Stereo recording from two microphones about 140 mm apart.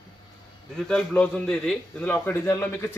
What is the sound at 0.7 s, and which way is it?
A man's voice, 5° left (ahead or behind).